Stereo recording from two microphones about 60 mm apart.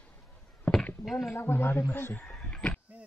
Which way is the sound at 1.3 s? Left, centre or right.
Left.